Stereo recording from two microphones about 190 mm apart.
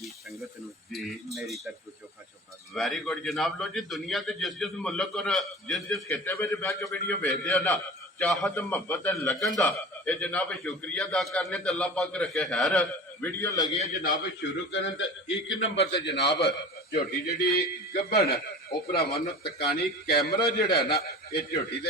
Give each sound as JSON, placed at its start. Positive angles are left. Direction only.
{"t": 0.0, "sound": "a sound", "side_deg": 0}
{"t": 0.9, "sound": "a man's voice", "side_deg": 0}
{"t": 2.7, "sound": "a man's voice", "side_deg": 0}
{"t": 9.3, "sound": "a man's voice", "side_deg": 0}
{"t": 13.7, "sound": "a man's voice", "side_deg": 50}
{"t": 14.7, "sound": "a man's voice", "side_deg": 70}
{"t": 15.8, "sound": "a man's voice", "side_deg": 30}
{"t": 16.0, "sound": "a man's voice", "side_deg": 65}